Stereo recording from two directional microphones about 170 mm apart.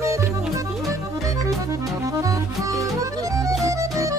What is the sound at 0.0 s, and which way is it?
Music, 15° right (ahead or behind).